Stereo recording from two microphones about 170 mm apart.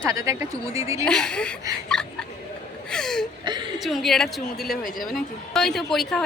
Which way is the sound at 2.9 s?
5° left (ahead or behind).